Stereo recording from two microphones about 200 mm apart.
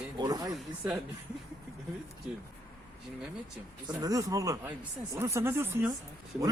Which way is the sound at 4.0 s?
15° right (ahead or behind).